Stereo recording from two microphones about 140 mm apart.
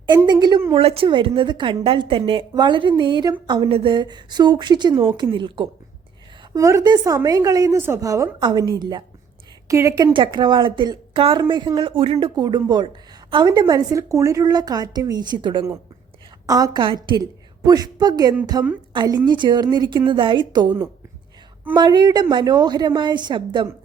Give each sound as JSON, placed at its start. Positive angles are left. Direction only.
{"t": 0.3, "sound": "a woman's voice", "side_deg": -30}
{"t": 0.7, "sound": "a woman's voice", "side_deg": -40}
{"t": 6.5, "sound": "a woman's voice", "side_deg": -25}
{"t": 10.1, "sound": "a woman's voice", "side_deg": -35}
{"t": 12.4, "sound": "a woman's voice", "side_deg": -30}
{"t": 21.8, "sound": "a woman's voice", "side_deg": -30}